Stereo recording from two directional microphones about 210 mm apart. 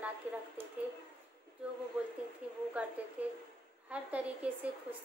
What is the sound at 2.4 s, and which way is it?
A woman's voice, 5° right (ahead or behind).